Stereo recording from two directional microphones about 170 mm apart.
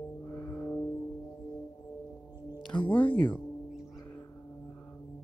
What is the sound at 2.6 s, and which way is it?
Music, 10° left (ahead or behind).